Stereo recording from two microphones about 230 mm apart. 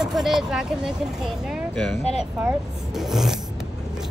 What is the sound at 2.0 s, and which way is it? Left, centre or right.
Speech, left.